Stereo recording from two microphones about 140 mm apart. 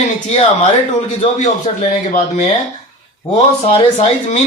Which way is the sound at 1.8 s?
55° left (ahead or behind).